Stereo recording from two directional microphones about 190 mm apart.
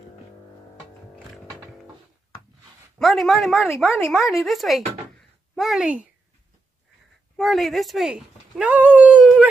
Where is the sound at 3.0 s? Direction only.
Centre (ahead or behind).